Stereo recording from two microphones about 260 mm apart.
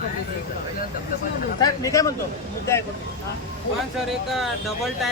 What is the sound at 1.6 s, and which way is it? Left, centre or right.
Speech, centre.